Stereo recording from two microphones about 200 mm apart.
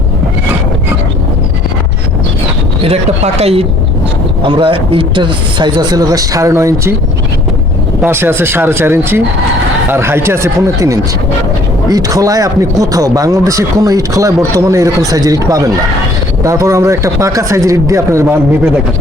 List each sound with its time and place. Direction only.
2.8 s speech: 30° right (ahead or behind); by 6.9 s 15° right (ahead or behind)
8.0 s speech: 10° right (ahead or behind)